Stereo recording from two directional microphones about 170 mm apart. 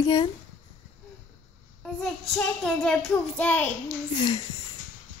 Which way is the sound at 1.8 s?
5° left (ahead or behind).